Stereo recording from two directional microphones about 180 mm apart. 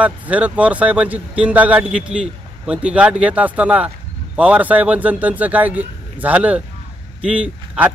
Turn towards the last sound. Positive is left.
turn(degrees=-5)  # may be behind; listen again after turning